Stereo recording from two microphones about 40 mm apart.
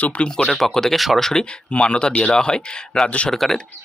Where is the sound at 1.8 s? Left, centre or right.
Left.